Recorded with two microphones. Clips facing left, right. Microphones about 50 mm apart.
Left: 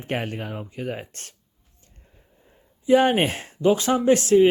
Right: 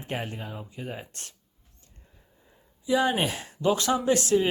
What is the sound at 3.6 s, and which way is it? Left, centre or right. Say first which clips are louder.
Speech: left 5 dB; left.